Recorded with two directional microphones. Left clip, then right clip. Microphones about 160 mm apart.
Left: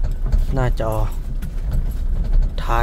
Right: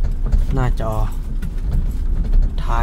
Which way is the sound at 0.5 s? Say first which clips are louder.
Left 2 dB; 10° left (ahead or behind).